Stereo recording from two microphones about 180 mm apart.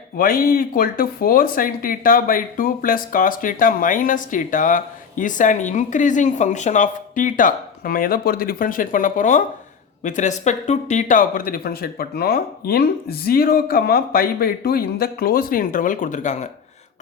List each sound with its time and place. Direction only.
0.2 s speech: 55° left (ahead or behind)